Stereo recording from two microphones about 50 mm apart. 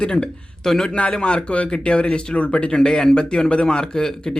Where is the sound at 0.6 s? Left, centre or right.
Centre.